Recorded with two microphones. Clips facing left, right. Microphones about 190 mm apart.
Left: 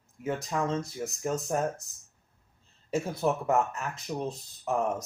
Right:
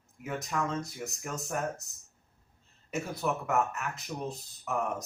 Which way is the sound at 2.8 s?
30° left (ahead or behind).